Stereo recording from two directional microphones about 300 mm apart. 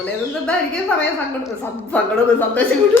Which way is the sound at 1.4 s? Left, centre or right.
Centre.